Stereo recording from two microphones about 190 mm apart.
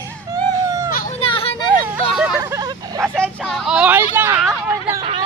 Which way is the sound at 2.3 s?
15° right (ahead or behind).